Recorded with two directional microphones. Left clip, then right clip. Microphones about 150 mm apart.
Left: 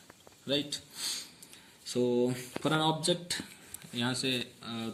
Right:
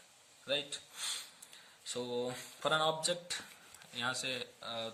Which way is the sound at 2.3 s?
40° right (ahead or behind).